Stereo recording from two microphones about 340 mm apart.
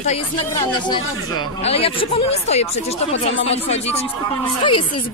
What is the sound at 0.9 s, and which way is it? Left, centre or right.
Speech, centre.